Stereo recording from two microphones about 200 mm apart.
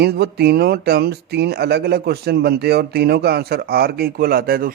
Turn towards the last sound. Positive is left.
turn(degrees=-45)  # may be behind; listen again after turning